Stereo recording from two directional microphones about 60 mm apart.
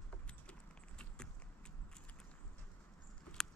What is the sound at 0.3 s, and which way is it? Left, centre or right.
Clip-clop, centre.